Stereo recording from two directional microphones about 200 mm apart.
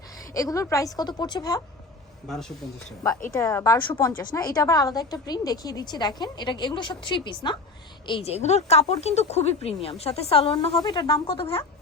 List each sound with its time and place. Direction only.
0.3 s a woman's voice: 15° left (ahead or behind)
2.2 s a woman's voice: centre (ahead or behind); by 11.6 s 25° left (ahead or behind)